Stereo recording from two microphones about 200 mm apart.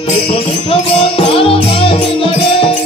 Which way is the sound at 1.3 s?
25° left (ahead or behind).